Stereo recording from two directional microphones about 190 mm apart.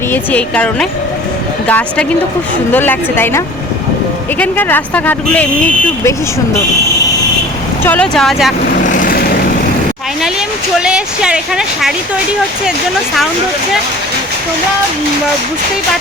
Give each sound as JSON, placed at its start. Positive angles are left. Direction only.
{"t": 0.1, "sound": "speech", "side_deg": 10}
{"t": 7.9, "sound": "speech", "side_deg": 5}
{"t": 8.8, "sound": "vehicle", "side_deg": 45}
{"t": 10.8, "sound": "speech", "side_deg": -5}